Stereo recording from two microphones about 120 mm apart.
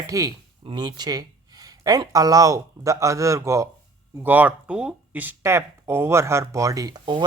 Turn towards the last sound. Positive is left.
turn(degrees=-40)  # may be behind; listen again after turning